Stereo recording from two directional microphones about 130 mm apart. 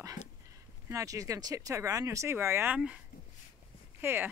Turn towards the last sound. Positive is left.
turn(degrees=-15)  # may be behind; listen again after turning